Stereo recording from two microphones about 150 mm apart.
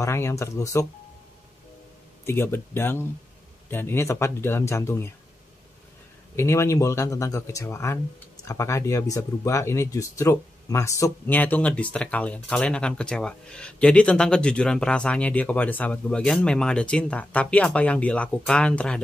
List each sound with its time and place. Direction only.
0.0 s speech: 15° left (ahead or behind)
2.2 s speech: 15° left (ahead or behind)
6.3 s speech: 20° left (ahead or behind)